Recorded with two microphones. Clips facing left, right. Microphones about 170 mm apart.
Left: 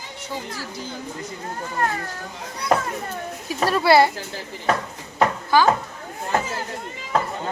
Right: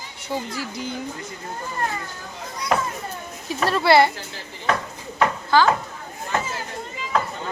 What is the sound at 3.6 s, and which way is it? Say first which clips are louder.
Speech: left 1 dB; 10° left (ahead or behind).